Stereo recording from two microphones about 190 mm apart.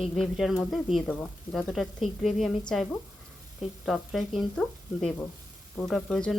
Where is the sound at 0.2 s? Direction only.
Centre (ahead or behind).